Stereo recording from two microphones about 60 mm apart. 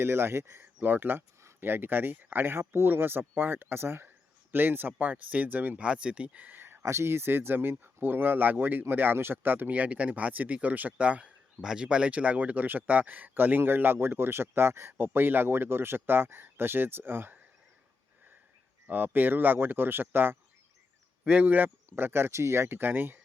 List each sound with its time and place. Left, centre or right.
0.0 s speech: right
6.8 s speech: right
11.6 s speech: centre; by 17.3 s right
18.9 s speech: right
21.2 s speech: right
21.8 s speech: right